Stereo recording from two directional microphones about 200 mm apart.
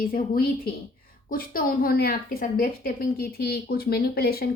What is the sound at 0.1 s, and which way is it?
A woman's voice, 45° left (ahead or behind).